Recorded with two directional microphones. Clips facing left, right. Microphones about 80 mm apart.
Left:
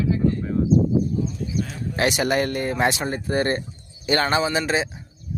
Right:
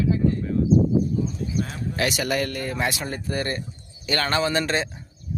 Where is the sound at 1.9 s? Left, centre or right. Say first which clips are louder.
Left 4 dB; left.